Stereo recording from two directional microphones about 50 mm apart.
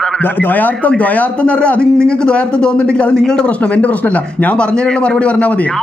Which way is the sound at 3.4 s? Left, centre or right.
Left.